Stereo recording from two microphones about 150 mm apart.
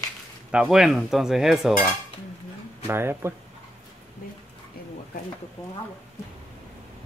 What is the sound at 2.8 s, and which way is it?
Speech, 15° right (ahead or behind).